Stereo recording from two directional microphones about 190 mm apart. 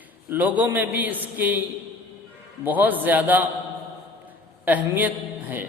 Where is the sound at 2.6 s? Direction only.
10° right (ahead or behind).